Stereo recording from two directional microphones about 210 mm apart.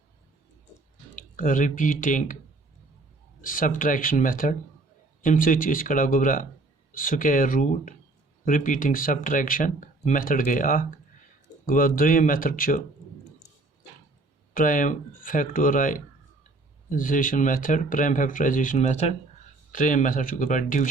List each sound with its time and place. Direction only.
1.1 s speech: 40° left (ahead or behind)
3.4 s speech: 40° left (ahead or behind)
14.5 s speech: 40° left (ahead or behind)